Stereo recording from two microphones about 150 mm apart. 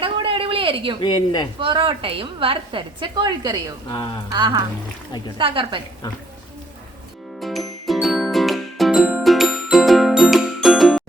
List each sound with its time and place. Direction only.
0.0 s a sound: 35° right (ahead or behind)
1.0 s speech: 30° left (ahead or behind)
1.5 s a woman's voice: 35° right (ahead or behind)
3.8 s speech: 30° left (ahead or behind)
4.3 s a woman's voice: 30° right (ahead or behind)
7.4 s music: centre (ahead or behind)